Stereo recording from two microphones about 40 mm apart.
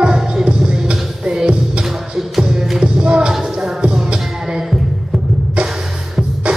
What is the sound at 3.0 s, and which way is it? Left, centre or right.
Music, right.